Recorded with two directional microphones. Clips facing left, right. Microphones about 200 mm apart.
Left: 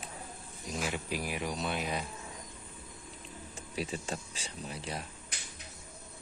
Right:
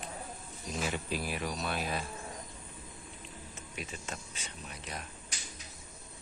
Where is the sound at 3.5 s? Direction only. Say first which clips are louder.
Left 8 dB; 35° left (ahead or behind).